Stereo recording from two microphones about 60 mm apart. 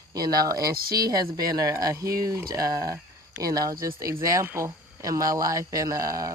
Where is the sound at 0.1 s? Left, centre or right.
Right.